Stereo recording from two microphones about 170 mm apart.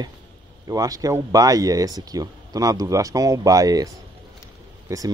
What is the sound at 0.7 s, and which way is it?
Speech, 20° right (ahead or behind).